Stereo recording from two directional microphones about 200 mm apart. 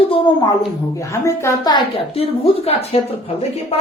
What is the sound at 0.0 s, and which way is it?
A woman's voice, 25° left (ahead or behind).